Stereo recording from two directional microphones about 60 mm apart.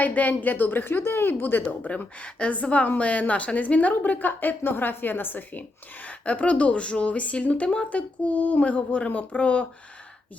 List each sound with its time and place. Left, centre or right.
0.0 s speech: left
1.9 s a woman's voice: left